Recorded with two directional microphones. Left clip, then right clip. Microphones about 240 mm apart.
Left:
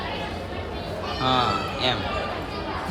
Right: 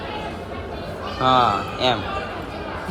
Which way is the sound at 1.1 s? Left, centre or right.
Centre.